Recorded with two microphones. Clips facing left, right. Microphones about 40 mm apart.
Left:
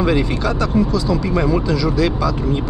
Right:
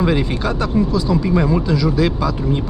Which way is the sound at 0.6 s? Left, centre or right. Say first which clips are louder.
Even; centre.